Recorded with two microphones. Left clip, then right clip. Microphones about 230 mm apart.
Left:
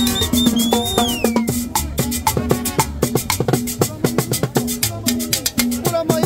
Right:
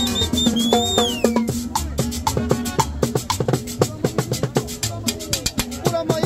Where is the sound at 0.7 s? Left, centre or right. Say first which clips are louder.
Even; left.